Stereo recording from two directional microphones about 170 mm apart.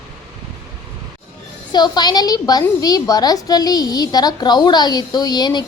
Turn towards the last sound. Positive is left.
turn(degrees=25)  # may be behind; listen again after turning